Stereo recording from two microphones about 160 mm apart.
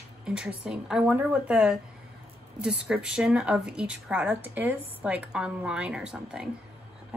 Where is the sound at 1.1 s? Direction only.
10° right (ahead or behind).